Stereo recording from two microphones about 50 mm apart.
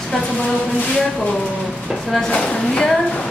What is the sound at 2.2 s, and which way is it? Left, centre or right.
Speech, centre.